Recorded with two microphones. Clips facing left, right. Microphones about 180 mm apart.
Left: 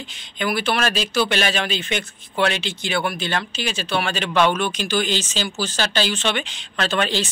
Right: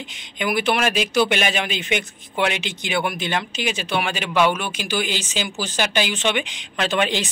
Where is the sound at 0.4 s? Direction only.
15° right (ahead or behind).